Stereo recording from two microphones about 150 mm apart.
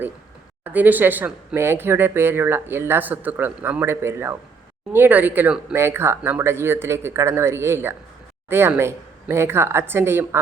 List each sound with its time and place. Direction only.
0.6 s speech: 10° right (ahead or behind)